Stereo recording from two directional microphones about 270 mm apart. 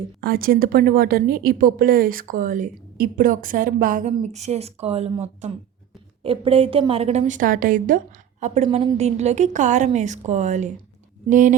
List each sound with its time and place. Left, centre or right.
0.2 s a woman's voice: right